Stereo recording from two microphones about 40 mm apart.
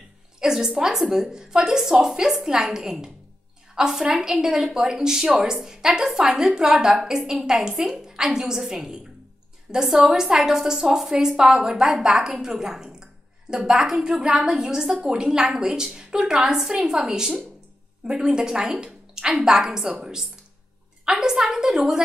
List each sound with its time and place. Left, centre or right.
0.4 s a woman's voice: centre
12.6 s a sound: centre
13.7 s a woman's voice: centre